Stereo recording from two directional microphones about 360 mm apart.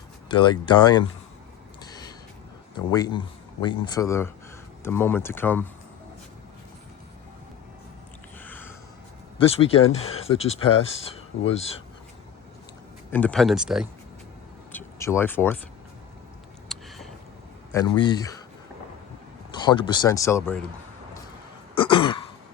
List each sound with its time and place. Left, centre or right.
0.3 s speech: centre
1.8 s gasp: centre
2.7 s speech: centre
8.4 s a sound: centre
9.4 s speech: centre
13.1 s speech: centre
14.7 s a sound: centre
16.6 s a sound: centre
17.7 s speech: centre
19.5 s speech: centre
21.8 s throat clearing: centre